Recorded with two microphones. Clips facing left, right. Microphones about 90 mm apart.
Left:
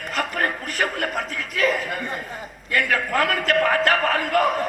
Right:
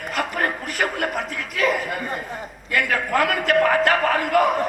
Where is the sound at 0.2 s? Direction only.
5° right (ahead or behind).